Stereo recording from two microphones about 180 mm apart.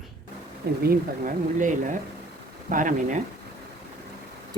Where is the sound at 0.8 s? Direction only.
50° right (ahead or behind).